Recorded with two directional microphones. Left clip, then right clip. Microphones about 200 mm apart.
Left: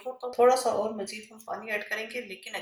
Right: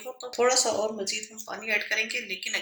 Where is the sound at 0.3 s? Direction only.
35° right (ahead or behind).